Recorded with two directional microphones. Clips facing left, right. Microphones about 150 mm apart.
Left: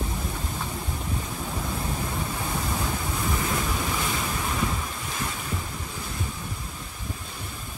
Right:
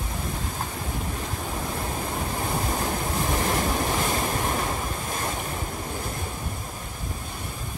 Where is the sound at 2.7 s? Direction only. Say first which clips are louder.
Right 3 dB; 45° right (ahead or behind).